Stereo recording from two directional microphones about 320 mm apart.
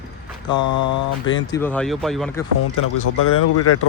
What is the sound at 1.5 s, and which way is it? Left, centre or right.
Speech, centre.